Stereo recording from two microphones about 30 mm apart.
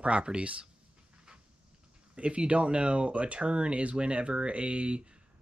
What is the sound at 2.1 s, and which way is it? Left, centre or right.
Speech, right.